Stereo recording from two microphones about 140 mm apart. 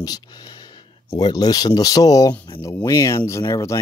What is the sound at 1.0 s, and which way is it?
Speech, 25° left (ahead or behind).